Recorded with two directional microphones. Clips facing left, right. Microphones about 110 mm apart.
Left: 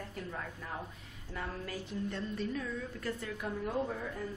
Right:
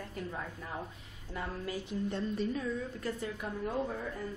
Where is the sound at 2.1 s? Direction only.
20° right (ahead or behind).